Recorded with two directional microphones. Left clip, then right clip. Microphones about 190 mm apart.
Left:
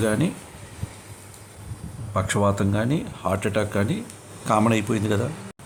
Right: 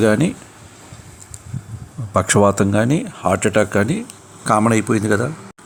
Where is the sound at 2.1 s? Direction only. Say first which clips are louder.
Right 8 dB; 30° right (ahead or behind).